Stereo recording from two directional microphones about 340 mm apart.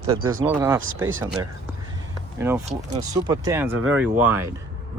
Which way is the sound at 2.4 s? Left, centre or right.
Centre.